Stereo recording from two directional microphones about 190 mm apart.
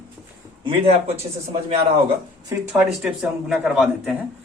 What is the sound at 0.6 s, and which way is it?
Speech, 30° right (ahead or behind).